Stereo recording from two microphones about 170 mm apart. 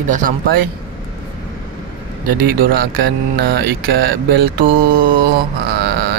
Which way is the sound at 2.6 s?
65° right (ahead or behind).